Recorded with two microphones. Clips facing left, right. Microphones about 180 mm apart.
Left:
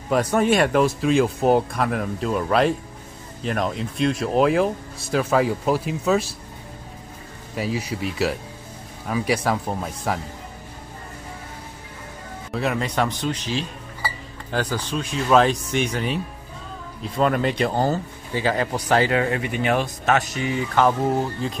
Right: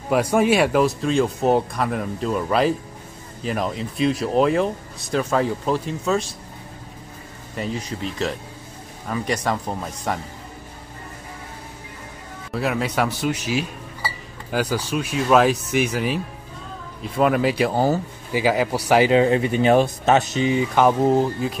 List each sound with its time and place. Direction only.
0.1 s speech: 10° right (ahead or behind)
7.5 s speech: 5° left (ahead or behind)
12.5 s speech: centre (ahead or behind); by 21.3 s 20° right (ahead or behind)